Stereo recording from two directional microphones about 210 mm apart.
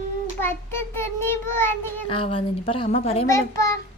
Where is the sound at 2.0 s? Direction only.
25° left (ahead or behind).